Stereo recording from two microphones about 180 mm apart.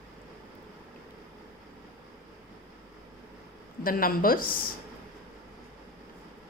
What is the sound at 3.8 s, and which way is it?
Speech, 50° left (ahead or behind).